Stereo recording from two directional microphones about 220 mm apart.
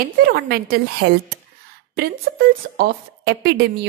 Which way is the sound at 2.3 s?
50° right (ahead or behind).